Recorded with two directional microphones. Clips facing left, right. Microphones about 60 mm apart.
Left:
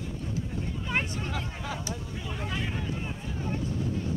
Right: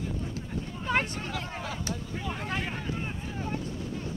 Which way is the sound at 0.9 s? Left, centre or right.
Right.